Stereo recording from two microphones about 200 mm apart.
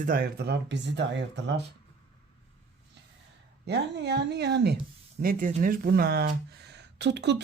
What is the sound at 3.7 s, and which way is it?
Speech, 55° right (ahead or behind).